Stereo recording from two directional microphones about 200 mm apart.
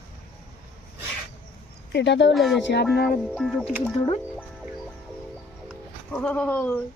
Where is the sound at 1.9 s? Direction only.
60° left (ahead or behind).